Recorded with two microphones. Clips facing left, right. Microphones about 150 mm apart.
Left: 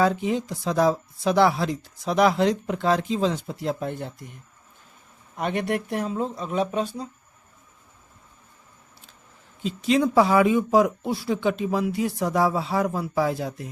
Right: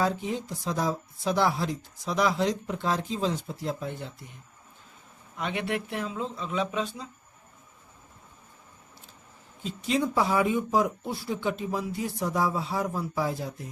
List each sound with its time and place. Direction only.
0.0 s speech: 80° left; by 4.3 s 50° left (ahead or behind)
5.4 s speech: 50° left (ahead or behind)
9.6 s speech: 90° left; by 13.7 s 75° left (ahead or behind)